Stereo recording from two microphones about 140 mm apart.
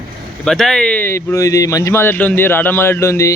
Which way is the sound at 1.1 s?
20° left (ahead or behind).